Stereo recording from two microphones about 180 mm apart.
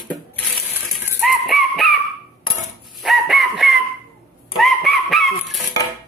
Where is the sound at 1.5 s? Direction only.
Centre (ahead or behind).